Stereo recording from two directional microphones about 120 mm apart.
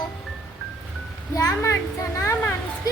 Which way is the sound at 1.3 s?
25° left (ahead or behind).